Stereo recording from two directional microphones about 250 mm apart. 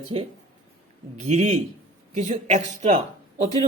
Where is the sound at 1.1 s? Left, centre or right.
Right.